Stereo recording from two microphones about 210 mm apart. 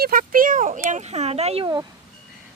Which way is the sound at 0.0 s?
40° right (ahead or behind).